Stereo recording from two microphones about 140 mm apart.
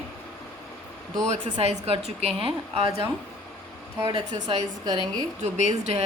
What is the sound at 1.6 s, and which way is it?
A woman's voice, 50° right (ahead or behind).